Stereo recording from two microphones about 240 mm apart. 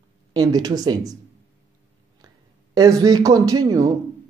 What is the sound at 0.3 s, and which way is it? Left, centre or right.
Speech, centre.